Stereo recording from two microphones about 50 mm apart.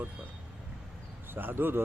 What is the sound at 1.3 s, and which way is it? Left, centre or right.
Speech, right.